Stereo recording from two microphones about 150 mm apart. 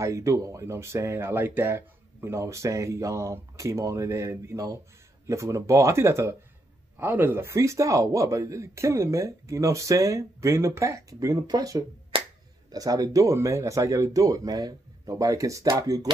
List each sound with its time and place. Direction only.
0.0 s speech: 20° right (ahead or behind)
12.1 s a sound: 35° right (ahead or behind)
12.7 s speech: 25° right (ahead or behind)